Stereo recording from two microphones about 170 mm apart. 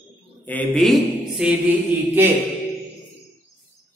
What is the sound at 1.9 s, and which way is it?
Mantra, 10° right (ahead or behind).